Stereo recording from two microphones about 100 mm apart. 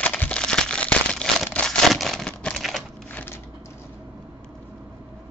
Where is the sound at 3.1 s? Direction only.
20° left (ahead or behind).